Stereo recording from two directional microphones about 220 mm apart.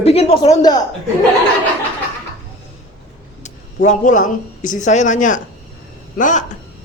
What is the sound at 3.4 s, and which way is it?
A man's voice, 35° left (ahead or behind).